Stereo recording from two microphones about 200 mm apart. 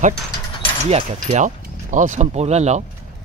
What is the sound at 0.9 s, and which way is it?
Speech, 35° right (ahead or behind).